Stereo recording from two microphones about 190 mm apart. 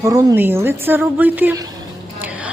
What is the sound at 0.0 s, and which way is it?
A man's voice, 20° right (ahead or behind).